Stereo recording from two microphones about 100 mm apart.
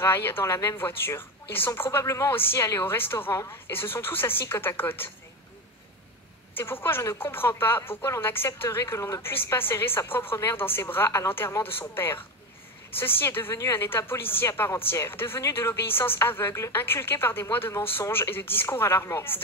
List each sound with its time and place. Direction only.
0.0 s a woman's voice: 25° left (ahead or behind)
6.5 s a woman's voice: 20° left (ahead or behind)